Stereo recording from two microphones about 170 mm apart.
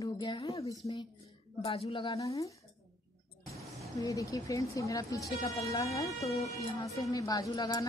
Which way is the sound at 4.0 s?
20° left (ahead or behind).